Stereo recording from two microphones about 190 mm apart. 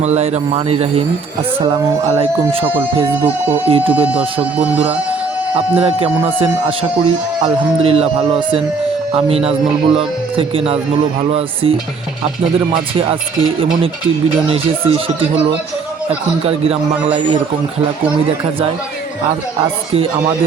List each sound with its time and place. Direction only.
0.0 s speech: 35° right (ahead or behind)
1.6 s speech: 15° right (ahead or behind)
2.0 s speech: 30° right (ahead or behind)
3.1 s speech: 10° right (ahead or behind)
3.7 s speech: 30° right (ahead or behind)
3.9 s speech: 5° right (ahead or behind)
5.8 s speech: 30° right (ahead or behind)
12.9 s speech: 30° right (ahead or behind)
19.9 s speech: 30° right (ahead or behind)